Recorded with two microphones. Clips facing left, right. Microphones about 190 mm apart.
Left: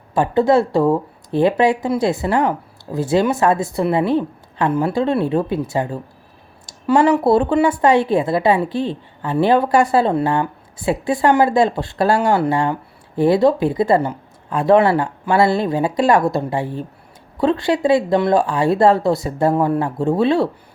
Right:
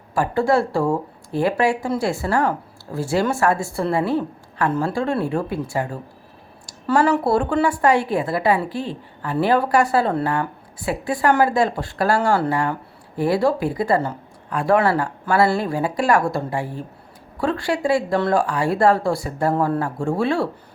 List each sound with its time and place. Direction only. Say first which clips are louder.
0.1 s a woman's voice: left 4 dB; 20° left (ahead or behind)